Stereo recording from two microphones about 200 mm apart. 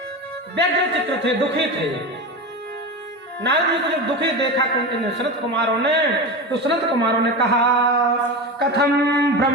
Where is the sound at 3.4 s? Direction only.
60° right (ahead or behind).